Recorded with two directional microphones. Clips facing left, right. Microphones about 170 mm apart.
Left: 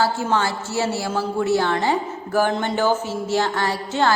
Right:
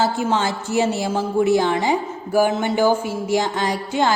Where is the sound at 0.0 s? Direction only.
20° right (ahead or behind).